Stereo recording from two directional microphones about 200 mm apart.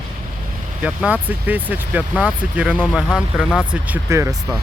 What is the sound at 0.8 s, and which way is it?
Speech, 5° right (ahead or behind).